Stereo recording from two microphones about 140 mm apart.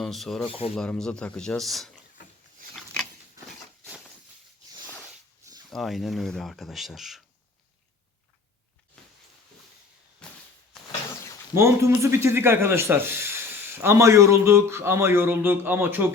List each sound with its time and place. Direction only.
0.0 s speech: centre (ahead or behind)
0.4 s speech: 40° left (ahead or behind)
0.8 s speech: 5° left (ahead or behind)
5.7 s speech: centre (ahead or behind)
9.0 s a sound: 5° left (ahead or behind)
10.2 s a sound: 5° left (ahead or behind)
11.5 s speech: 20° right (ahead or behind)